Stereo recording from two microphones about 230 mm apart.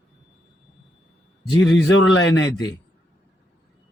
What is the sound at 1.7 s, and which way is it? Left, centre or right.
Speech, left.